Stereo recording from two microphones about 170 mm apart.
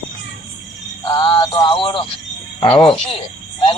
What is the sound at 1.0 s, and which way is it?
Music, 30° left (ahead or behind).